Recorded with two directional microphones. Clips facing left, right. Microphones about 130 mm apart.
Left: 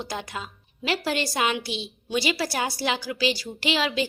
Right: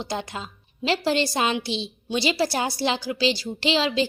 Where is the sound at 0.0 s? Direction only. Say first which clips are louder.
Right 2 dB; 25° right (ahead or behind).